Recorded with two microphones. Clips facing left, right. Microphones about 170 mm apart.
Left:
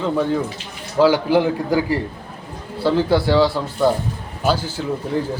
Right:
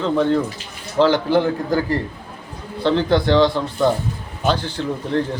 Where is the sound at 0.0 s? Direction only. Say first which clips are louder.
Right 2 dB; 5° left (ahead or behind).